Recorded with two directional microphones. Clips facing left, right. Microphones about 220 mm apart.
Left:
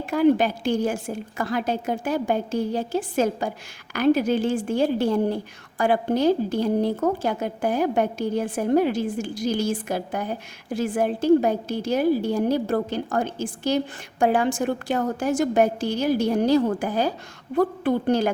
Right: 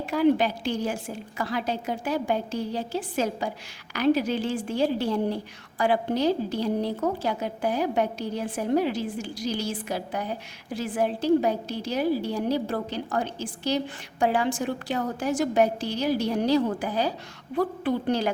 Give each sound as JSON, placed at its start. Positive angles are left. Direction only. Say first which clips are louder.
{"t": 0.0, "sound": "a woman's voice", "louder": "left 3 dB", "side_deg": 50}